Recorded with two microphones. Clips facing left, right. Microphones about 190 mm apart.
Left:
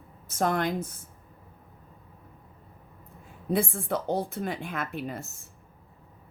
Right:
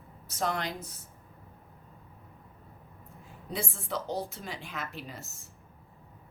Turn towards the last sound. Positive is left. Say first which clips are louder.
# left 7 dB
turn(degrees=55)  # may be behind; listen again after turning